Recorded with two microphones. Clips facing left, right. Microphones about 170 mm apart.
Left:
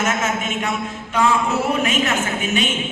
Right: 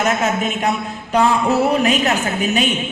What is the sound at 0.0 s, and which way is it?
A woman's voice, 35° right (ahead or behind).